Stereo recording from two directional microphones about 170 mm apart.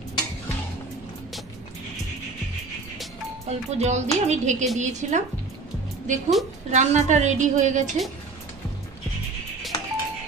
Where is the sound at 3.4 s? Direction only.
40° right (ahead or behind).